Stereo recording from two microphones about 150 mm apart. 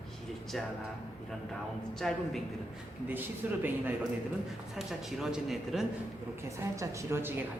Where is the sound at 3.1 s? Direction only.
10° right (ahead or behind).